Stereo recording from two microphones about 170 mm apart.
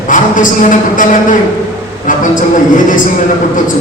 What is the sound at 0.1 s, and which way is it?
Speech, 50° left (ahead or behind).